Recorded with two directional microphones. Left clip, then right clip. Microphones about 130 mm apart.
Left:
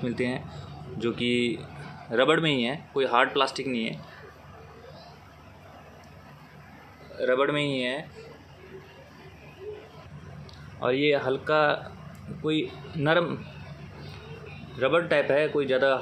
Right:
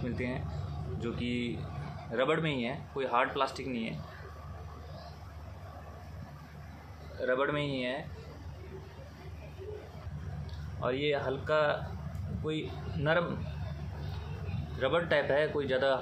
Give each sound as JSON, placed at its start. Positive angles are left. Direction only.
{"t": 0.0, "sound": "speech", "side_deg": 50}
{"t": 7.2, "sound": "a man's voice", "side_deg": 40}
{"t": 10.8, "sound": "speech", "side_deg": 50}
{"t": 14.8, "sound": "a man's voice", "side_deg": 40}